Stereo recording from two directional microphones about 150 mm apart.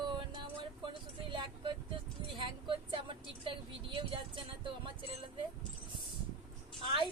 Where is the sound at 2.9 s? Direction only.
35° right (ahead or behind).